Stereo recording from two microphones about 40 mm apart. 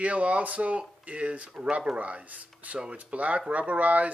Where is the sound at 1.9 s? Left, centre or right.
Right.